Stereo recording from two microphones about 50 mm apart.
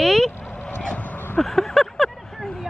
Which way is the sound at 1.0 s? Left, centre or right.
Left.